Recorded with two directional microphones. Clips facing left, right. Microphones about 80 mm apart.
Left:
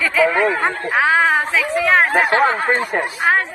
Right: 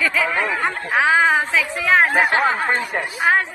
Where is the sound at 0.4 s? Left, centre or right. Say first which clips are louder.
Left 4 dB; left.